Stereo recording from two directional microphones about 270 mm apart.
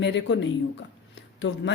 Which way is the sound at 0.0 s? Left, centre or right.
Left.